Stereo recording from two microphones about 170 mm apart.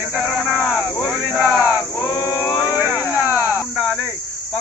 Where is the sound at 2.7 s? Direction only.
5° right (ahead or behind).